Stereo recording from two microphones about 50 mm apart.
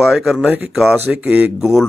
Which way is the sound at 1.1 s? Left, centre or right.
Right.